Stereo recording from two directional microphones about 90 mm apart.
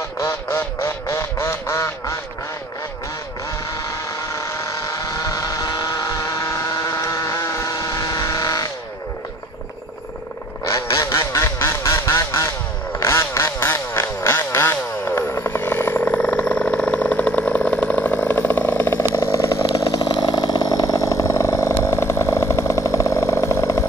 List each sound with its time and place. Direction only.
0.2 s quack: 30° left (ahead or behind)
4.3 s vehicle: 35° left (ahead or behind)
10.6 s quack: 35° left (ahead or behind)
13.0 s motorcycle: 30° left (ahead or behind)
19.1 s chainsaw: 35° left (ahead or behind)
21.8 s a sound: 30° left (ahead or behind)